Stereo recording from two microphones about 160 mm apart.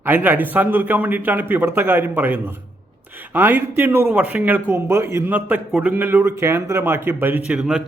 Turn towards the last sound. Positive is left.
turn(degrees=-5)  # may be behind; listen again after turning